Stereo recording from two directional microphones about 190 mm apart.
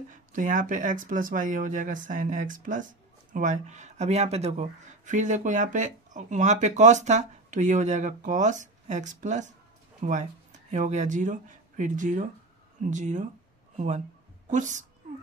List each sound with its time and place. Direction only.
0.1 s speech: 40° right (ahead or behind)